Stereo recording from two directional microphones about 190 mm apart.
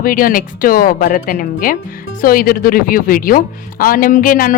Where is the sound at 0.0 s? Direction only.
50° left (ahead or behind).